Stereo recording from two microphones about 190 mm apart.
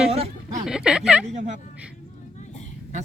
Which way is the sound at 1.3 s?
40° right (ahead or behind).